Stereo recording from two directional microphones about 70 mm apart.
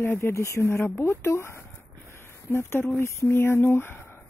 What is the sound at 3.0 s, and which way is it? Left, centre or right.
Speech, left.